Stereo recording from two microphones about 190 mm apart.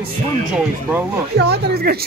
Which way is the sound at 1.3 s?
60° right (ahead or behind).